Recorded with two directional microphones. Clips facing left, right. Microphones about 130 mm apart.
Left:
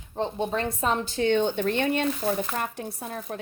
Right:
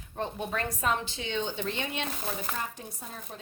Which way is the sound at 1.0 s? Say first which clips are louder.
Left 10 dB; 50° left (ahead or behind).